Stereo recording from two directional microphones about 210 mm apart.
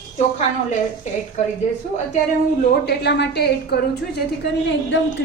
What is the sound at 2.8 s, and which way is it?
A woman's voice, 50° left (ahead or behind).